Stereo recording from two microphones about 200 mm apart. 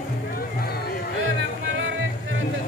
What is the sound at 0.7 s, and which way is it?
Music, 50° left (ahead or behind).